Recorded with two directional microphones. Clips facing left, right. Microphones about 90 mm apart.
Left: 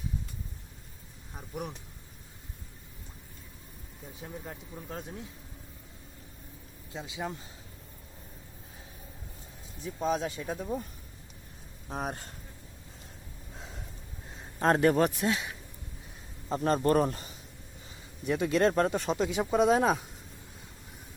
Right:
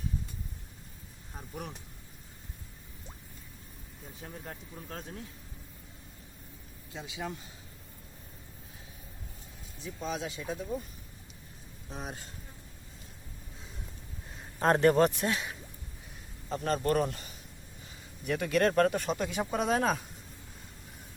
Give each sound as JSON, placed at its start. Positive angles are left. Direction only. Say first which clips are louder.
{"t": 1.3, "sound": "speech", "louder": "left 3 dB", "side_deg": 5}
{"t": 4.2, "sound": "speech", "louder": "left 2 dB", "side_deg": 5}
{"t": 6.9, "sound": "speech", "louder": "left 2 dB", "side_deg": 25}
{"t": 9.8, "sound": "speech", "louder": "left 6 dB", "side_deg": 40}
{"t": 11.9, "sound": "a man's voice", "louder": "left 6 dB", "side_deg": 50}
{"t": 14.7, "sound": "a man's voice", "louder": "right 1 dB", "side_deg": 5}
{"t": 16.5, "sound": "speech", "louder": "left 3 dB", "side_deg": 35}
{"t": 18.3, "sound": "speech", "louder": "left 2 dB", "side_deg": 20}